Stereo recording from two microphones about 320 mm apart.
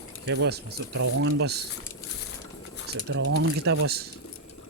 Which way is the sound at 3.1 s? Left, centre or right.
Right.